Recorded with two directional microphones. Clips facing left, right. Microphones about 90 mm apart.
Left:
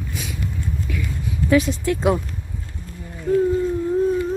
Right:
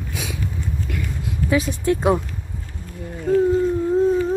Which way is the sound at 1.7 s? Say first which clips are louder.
Right 1 dB; 25° right (ahead or behind).